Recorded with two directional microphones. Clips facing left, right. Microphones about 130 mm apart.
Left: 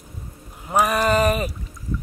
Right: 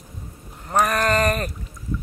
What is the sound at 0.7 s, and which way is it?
Sheep, 5° left (ahead or behind).